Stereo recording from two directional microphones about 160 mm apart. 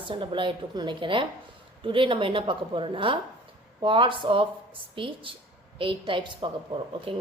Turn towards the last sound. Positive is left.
turn(degrees=-35)  # may be behind; listen again after turning